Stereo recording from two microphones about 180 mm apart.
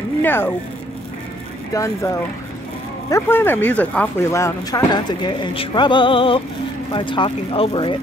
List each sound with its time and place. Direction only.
0.2 s speech: 10° left (ahead or behind)
1.7 s speech: 15° left (ahead or behind)